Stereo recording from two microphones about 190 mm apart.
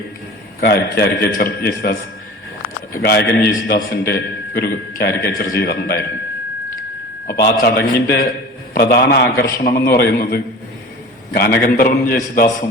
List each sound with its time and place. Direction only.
0.6 s a man's voice: 60° left (ahead or behind)
3.0 s a man's voice: 60° left (ahead or behind)
7.3 s a man's voice: 55° left (ahead or behind)